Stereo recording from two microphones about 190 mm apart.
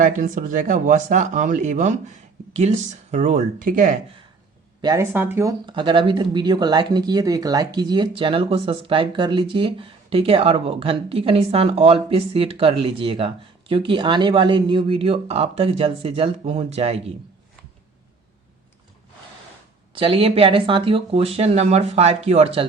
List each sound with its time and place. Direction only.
0.0 s speech: 40° right (ahead or behind)
4.8 s speech: 20° right (ahead or behind)
19.9 s speech: 25° right (ahead or behind)